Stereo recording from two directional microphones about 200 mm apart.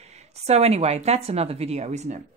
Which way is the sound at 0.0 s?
35° right (ahead or behind).